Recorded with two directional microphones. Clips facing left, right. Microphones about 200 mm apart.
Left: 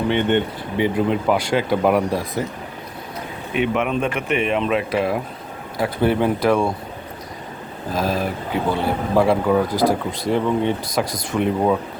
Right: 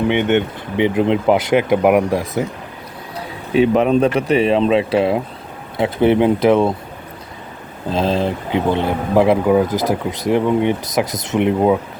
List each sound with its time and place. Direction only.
0.8 s speech: 20° right (ahead or behind)
3.2 s speech: 35° right (ahead or behind)
7.9 s speech: 25° right (ahead or behind)